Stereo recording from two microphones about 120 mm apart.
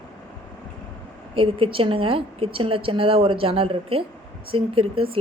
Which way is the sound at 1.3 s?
50° right (ahead or behind).